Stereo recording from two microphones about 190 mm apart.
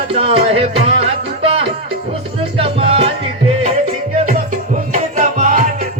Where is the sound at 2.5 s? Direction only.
30° right (ahead or behind).